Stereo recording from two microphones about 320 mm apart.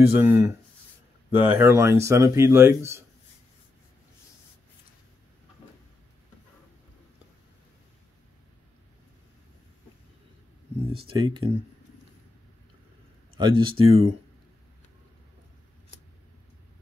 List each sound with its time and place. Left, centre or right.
0.0 s speech: centre
1.5 s speech: centre
11.1 s speech: centre
13.4 s speech: centre